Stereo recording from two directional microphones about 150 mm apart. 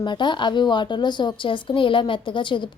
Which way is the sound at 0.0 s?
30° left (ahead or behind).